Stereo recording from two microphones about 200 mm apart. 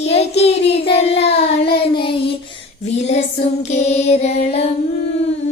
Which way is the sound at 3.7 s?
35° left (ahead or behind).